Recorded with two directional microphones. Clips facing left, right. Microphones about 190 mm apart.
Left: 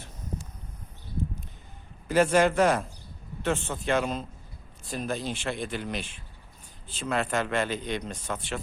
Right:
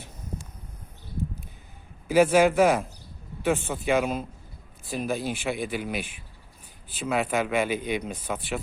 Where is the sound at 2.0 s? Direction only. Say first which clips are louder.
Right 3 dB; 5° right (ahead or behind).